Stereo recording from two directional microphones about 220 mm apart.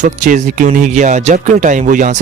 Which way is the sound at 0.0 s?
35° right (ahead or behind).